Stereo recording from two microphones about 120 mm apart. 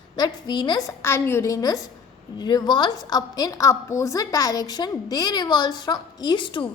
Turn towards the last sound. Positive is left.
turn(degrees=45)  # may be behind; listen again after turning